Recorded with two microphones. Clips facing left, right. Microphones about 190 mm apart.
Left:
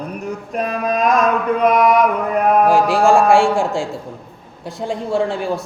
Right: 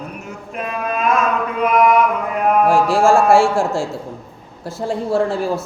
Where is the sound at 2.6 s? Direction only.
Centre (ahead or behind).